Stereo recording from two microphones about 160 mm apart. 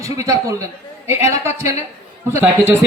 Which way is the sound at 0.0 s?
20° right (ahead or behind).